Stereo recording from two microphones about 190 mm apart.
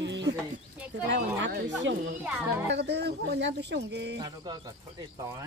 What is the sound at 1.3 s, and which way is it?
Speech, 70° right (ahead or behind).